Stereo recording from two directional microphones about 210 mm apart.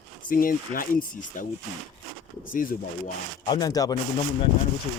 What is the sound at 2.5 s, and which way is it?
Speech, 40° left (ahead or behind).